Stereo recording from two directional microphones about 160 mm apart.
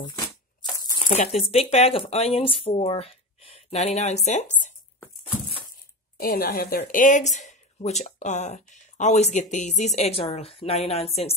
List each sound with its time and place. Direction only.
0.6 s crumpling: 20° left (ahead or behind)
1.0 s speech: 45° left (ahead or behind)
6.1 s a woman's voice: 70° left (ahead or behind)
6.8 s speech: 55° left (ahead or behind)